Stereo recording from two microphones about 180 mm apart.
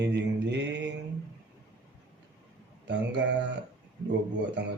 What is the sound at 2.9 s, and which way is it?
Speech, 75° right (ahead or behind).